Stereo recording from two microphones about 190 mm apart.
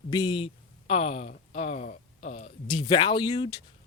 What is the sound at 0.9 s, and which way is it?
Speech, 35° left (ahead or behind).